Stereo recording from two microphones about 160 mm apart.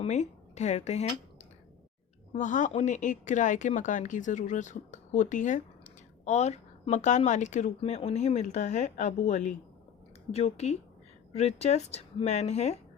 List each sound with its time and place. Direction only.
0.0 s a woman's voice: 45° left (ahead or behind)